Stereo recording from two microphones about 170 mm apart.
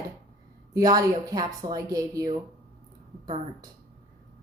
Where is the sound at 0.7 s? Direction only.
20° right (ahead or behind).